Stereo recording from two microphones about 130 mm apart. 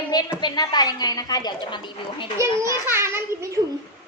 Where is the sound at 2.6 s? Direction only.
20° right (ahead or behind).